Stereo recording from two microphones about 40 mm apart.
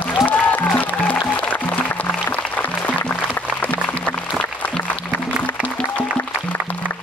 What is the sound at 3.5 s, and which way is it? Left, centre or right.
Music, left.